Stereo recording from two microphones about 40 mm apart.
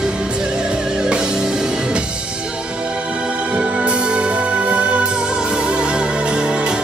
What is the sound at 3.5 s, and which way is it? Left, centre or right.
Music, right.